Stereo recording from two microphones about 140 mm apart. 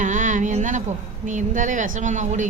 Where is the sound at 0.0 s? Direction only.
65° right (ahead or behind).